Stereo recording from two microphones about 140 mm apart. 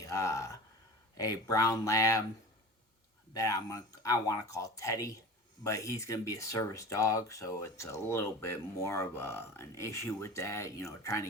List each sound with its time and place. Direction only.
0.0 s speech: 25° left (ahead or behind)
3.3 s speech: 25° left (ahead or behind)